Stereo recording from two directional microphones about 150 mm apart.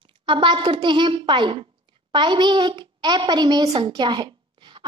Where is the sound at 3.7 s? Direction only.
30° right (ahead or behind).